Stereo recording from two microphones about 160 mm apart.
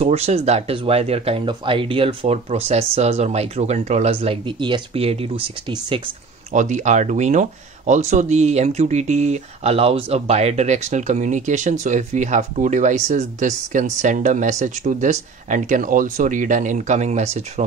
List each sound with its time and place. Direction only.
0.0 s speech: 40° right (ahead or behind)
6.5 s speech: 50° right (ahead or behind)